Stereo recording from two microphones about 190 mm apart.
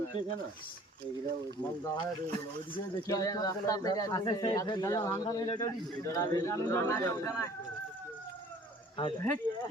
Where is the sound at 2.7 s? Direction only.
20° left (ahead or behind).